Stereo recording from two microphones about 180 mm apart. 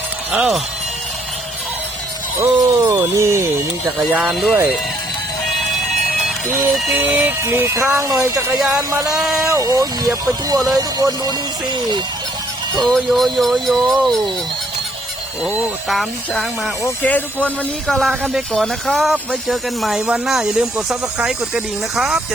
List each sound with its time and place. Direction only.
0.3 s speech: 5° right (ahead or behind)
2.4 s speech: 15° right (ahead or behind)
4.2 s speech: centre (ahead or behind)
6.7 s speech: 5° right (ahead or behind); by 12.0 s 25° right (ahead or behind)
12.9 s speech: centre (ahead or behind)
15.4 s speech: 5° right (ahead or behind)